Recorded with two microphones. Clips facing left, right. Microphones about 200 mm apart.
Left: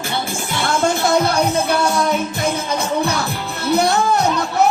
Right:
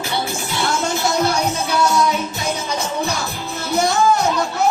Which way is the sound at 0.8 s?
55° left (ahead or behind).